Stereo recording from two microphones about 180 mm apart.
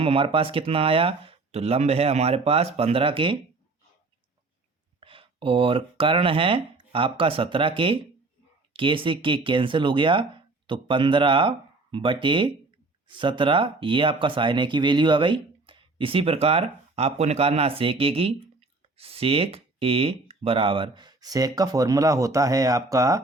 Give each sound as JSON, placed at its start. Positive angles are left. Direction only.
{"t": 0.0, "sound": "speech", "side_deg": -30}
{"t": 4.9, "sound": "speech", "side_deg": -30}